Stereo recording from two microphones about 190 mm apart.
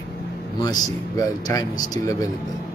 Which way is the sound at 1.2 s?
20° left (ahead or behind).